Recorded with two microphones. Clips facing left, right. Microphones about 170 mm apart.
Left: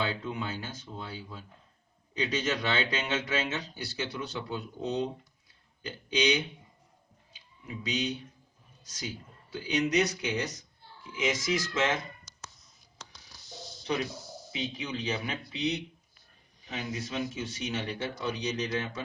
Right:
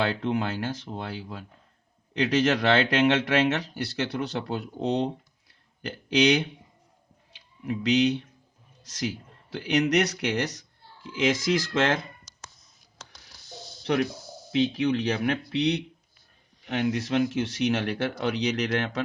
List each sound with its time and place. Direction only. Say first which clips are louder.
0.0 s speech: right 7 dB; 75° right (ahead or behind)
7.6 s speech: right 11 dB; 75° right (ahead or behind)
13.8 s speech: right 7 dB; 70° right (ahead or behind)